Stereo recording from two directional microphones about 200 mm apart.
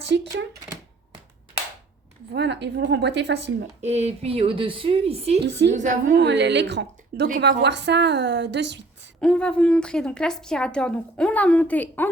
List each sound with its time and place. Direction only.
2.3 s a woman's voice: 60° right (ahead or behind)
3.8 s a woman's voice: 35° right (ahead or behind)
5.5 s a woman's voice: 60° right (ahead or behind)
5.7 s a woman's voice: 40° right (ahead or behind)
6.1 s a woman's voice: 60° right (ahead or behind)
9.2 s a woman's voice: 5° left (ahead or behind)